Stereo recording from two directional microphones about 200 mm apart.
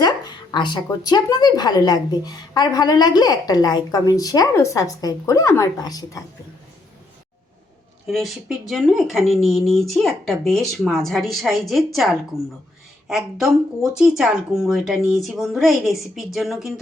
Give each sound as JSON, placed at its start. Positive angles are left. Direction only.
{"t": 0.0, "sound": "speech", "side_deg": 20}
{"t": 8.0, "sound": "speech", "side_deg": 0}
{"t": 13.1, "sound": "speech", "side_deg": 0}